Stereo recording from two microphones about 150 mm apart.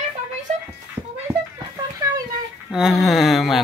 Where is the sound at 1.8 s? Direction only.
25° right (ahead or behind).